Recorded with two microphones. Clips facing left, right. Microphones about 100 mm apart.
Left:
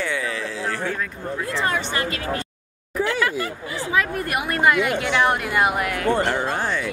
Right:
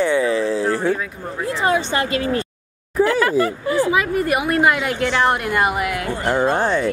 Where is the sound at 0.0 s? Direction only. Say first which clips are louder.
Right 9 dB; 30° right (ahead or behind).